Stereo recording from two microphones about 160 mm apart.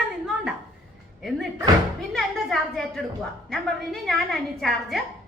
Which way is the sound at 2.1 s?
Centre (ahead or behind).